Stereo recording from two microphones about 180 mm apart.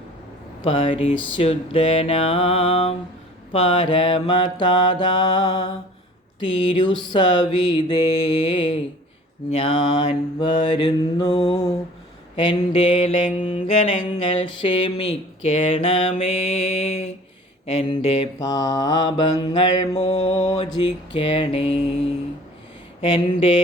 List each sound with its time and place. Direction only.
0.6 s mantra: 30° left (ahead or behind)
13.2 s mantra: 40° left (ahead or behind)
14.3 s mantra: 30° left (ahead or behind)
18.3 s mantra: 20° left (ahead or behind)
20.0 s mantra: 40° left (ahead or behind)
20.8 s mantra: 30° left (ahead or behind)
23.0 s mantra: 30° left (ahead or behind)